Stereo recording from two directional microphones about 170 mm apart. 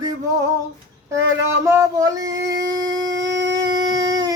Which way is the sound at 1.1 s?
15° right (ahead or behind).